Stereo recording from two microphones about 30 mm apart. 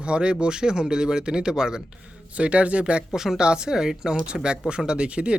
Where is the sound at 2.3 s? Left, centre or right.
Right.